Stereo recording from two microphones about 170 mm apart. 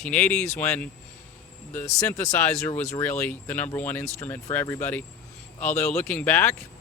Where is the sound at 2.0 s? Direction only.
15° left (ahead or behind).